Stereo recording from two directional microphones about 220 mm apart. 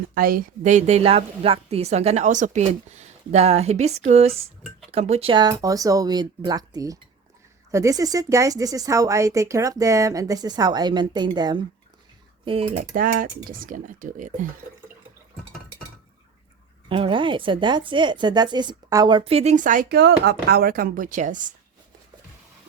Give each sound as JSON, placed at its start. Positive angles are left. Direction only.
{"t": 0.1, "sound": "a woman's voice", "side_deg": -40}
{"t": 16.9, "sound": "a woman's voice", "side_deg": -20}